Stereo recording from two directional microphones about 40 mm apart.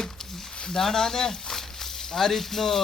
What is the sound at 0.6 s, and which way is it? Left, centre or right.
Speech, centre.